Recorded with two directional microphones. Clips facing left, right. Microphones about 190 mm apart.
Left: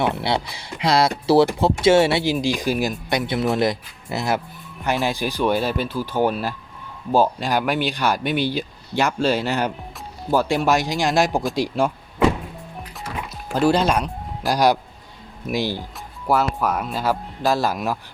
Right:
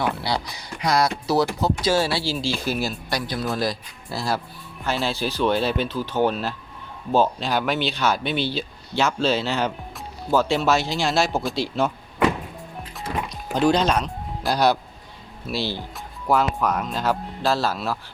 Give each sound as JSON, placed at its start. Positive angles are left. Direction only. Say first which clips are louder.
{"t": 0.0, "sound": "speech", "louder": "left 3 dB", "side_deg": 25}
{"t": 13.2, "sound": "speech", "louder": "left 2 dB", "side_deg": 5}